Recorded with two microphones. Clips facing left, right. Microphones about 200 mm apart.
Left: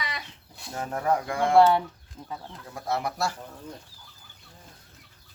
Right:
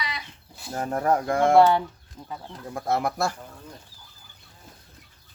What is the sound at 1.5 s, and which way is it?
Speech, centre (ahead or behind).